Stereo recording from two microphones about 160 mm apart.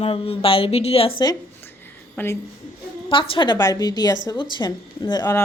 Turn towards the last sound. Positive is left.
turn(degrees=20)  # may be behind; listen again after turning